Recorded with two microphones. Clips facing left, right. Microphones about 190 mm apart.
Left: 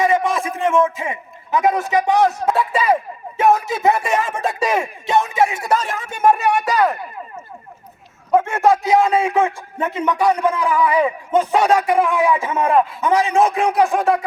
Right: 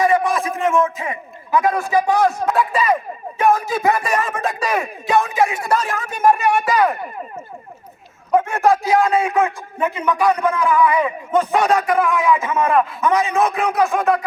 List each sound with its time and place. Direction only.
0.0 s a man's voice: 25° left (ahead or behind)
8.4 s a man's voice: 25° left (ahead or behind)